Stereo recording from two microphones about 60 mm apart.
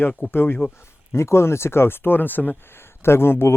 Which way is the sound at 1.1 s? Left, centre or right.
Left.